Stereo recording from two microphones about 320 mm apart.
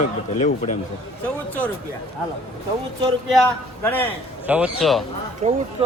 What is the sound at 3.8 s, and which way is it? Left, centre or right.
A man's voice, centre.